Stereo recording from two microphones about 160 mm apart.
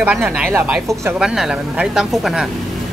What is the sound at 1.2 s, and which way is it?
Speech, 5° right (ahead or behind).